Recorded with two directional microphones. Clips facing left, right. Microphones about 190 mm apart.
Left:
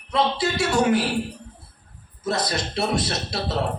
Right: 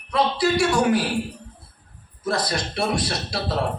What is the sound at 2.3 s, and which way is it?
Speech, 20° left (ahead or behind).